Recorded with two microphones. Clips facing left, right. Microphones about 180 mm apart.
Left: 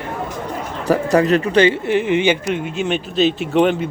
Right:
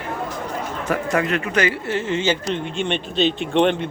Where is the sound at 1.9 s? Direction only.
15° left (ahead or behind).